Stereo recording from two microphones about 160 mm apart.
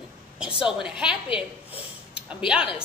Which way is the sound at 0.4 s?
5° right (ahead or behind).